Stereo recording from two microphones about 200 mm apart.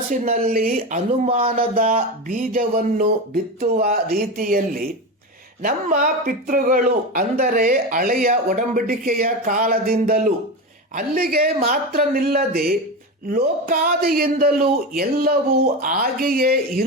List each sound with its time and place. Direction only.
0.1 s speech: 40° right (ahead or behind)